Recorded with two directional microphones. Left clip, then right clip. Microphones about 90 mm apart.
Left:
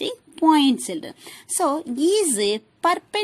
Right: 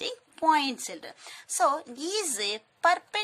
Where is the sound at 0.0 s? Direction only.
40° left (ahead or behind).